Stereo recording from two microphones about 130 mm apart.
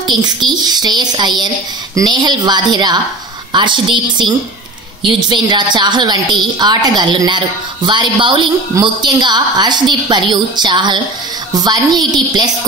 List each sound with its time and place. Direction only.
0.0 s a woman's voice: 35° right (ahead or behind)